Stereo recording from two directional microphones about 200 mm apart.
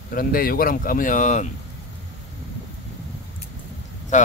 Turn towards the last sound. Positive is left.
turn(degrees=35)  # may be behind; listen again after turning